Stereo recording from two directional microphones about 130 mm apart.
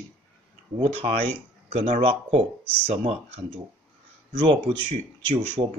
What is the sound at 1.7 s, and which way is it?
Speech, 60° right (ahead or behind).